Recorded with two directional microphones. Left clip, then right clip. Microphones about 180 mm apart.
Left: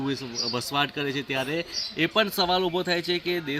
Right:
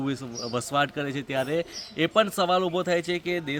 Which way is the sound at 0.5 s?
30° right (ahead or behind).